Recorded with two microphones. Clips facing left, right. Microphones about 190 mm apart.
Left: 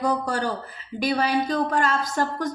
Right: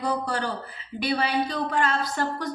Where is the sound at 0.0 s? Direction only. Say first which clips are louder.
Left 3 dB; 45° left (ahead or behind).